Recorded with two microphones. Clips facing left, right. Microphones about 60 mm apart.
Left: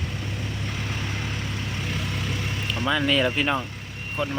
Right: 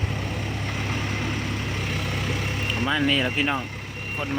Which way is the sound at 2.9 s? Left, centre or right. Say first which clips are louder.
Left 2 dB; centre.